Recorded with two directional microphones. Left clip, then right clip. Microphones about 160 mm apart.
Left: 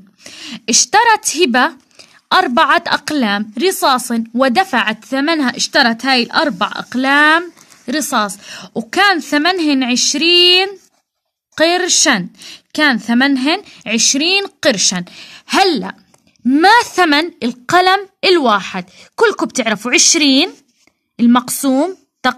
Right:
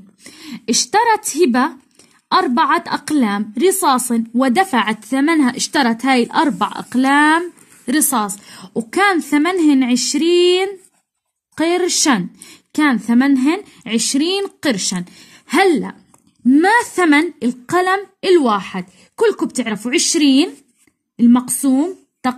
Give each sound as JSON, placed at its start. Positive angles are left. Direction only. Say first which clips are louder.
{"t": 0.2, "sound": "speech", "louder": "left 5 dB", "side_deg": 30}
{"t": 8.3, "sound": "a woman's voice", "louder": "left 3 dB", "side_deg": 35}
{"t": 19.1, "sound": "a woman's voice", "louder": "left 3 dB", "side_deg": 45}
{"t": 21.2, "sound": "a woman's voice", "louder": "left 2 dB", "side_deg": 40}